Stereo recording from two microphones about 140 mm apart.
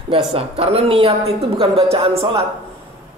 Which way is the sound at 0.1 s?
45° right (ahead or behind).